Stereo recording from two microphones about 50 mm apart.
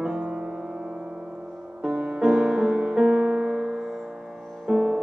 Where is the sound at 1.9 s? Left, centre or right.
Centre.